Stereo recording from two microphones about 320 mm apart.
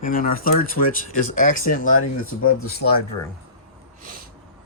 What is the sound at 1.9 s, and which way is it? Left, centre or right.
Speech, left.